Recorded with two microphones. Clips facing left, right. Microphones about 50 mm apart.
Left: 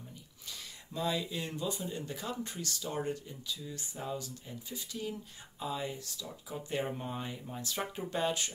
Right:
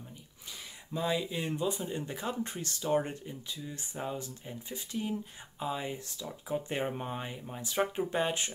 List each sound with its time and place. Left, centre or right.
0.9 s speech: centre